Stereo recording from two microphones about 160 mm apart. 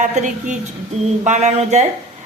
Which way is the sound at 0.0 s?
50° right (ahead or behind).